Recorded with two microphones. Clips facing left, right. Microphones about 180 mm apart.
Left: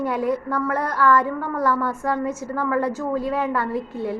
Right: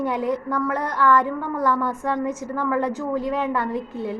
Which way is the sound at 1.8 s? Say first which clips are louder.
Even; 15° right (ahead or behind).